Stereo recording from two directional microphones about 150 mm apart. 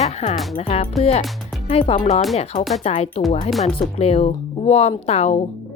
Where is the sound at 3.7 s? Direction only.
40° left (ahead or behind).